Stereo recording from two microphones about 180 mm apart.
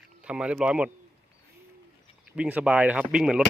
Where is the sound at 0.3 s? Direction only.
5° right (ahead or behind).